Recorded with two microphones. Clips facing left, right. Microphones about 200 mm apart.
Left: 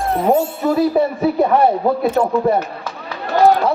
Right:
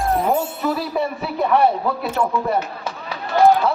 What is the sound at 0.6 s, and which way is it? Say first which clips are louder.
A man's voice: left 8 dB; 40° left (ahead or behind).